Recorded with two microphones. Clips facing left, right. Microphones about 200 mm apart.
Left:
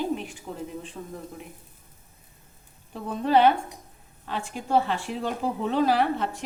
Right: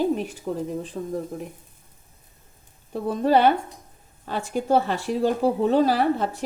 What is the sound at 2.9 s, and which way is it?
A woman's voice, 40° right (ahead or behind).